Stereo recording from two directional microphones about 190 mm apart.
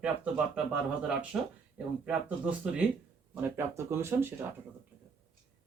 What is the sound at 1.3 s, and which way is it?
Speech, 10° right (ahead or behind).